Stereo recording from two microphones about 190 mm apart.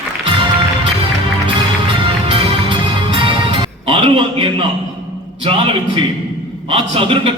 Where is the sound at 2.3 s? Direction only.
25° right (ahead or behind).